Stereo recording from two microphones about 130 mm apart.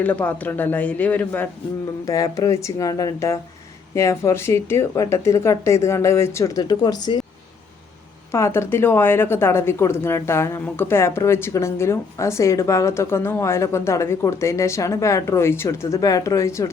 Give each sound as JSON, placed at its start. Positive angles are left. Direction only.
{"t": 0.0, "sound": "a man's voice", "side_deg": 10}
{"t": 2.0, "sound": "a woman's voice", "side_deg": 25}
{"t": 8.3, "sound": "a woman's voice", "side_deg": 20}